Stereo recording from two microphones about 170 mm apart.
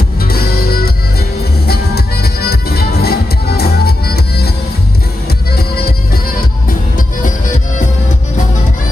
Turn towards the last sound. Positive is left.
turn(degrees=55)  # may be behind; listen again after turning